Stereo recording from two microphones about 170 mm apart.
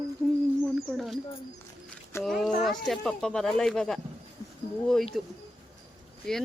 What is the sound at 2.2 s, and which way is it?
Speech, centre (ahead or behind).